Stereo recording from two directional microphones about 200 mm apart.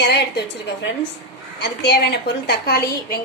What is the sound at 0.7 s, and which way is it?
A woman's voice, 60° left (ahead or behind).